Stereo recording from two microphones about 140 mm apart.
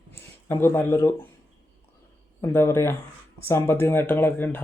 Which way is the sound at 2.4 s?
20° left (ahead or behind).